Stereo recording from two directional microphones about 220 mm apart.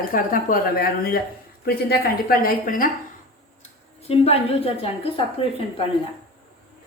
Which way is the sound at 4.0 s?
25° left (ahead or behind).